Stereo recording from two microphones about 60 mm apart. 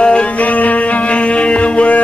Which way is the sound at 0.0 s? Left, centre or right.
Centre.